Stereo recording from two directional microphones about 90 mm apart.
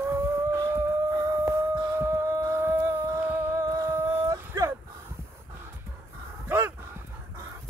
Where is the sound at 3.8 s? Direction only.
35° right (ahead or behind).